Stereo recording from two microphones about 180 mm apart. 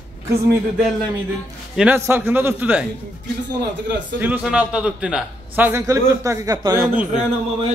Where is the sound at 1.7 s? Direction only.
10° right (ahead or behind).